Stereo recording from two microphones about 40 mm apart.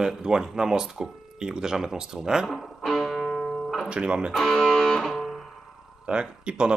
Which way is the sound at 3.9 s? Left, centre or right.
Right.